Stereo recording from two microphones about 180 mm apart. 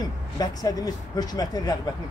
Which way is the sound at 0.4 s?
20° left (ahead or behind).